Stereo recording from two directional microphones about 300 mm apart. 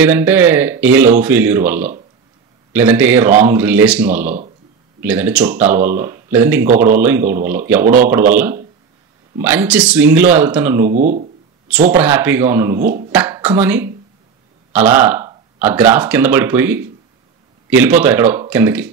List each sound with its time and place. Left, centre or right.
0.0 s a man's voice: centre
7.8 s speech: right
8.1 s speech: centre
10.9 s speech: right
11.9 s speech: centre
14.9 s speech: centre